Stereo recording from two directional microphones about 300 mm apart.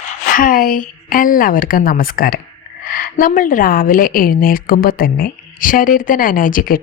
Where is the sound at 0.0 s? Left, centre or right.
Left.